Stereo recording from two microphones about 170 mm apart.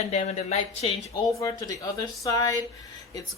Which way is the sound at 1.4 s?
20° left (ahead or behind).